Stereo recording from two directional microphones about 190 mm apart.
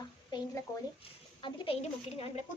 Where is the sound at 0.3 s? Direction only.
25° left (ahead or behind).